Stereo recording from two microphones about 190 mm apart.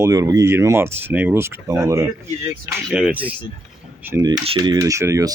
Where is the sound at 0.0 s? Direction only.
15° right (ahead or behind).